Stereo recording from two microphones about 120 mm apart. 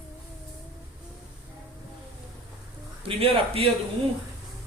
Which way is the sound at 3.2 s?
50° right (ahead or behind).